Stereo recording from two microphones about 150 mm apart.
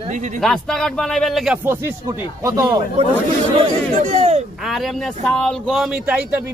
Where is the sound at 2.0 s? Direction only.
20° right (ahead or behind).